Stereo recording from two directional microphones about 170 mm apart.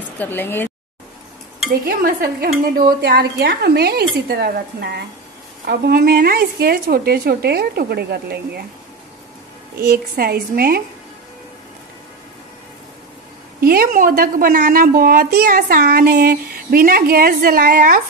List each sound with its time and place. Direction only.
0.2 s speech: 10° left (ahead or behind)
1.9 s a woman's voice: 60° right (ahead or behind)
3.0 s a woman's voice: 75° right (ahead or behind)
9.8 s a woman's voice: 60° right (ahead or behind)
13.6 s a woman's voice: 60° right (ahead or behind)